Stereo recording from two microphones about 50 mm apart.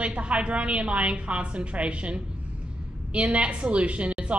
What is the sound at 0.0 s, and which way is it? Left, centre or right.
A woman's voice, right.